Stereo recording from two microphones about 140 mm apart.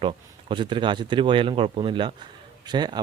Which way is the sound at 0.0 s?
35° right (ahead or behind).